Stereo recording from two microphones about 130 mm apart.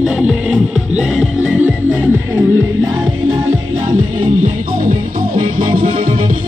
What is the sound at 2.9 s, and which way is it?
Music, 30° right (ahead or behind).